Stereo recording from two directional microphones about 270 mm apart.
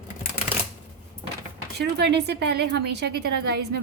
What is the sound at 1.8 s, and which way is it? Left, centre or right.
Speech, right.